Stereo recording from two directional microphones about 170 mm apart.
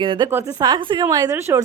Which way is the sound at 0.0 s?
30° right (ahead or behind).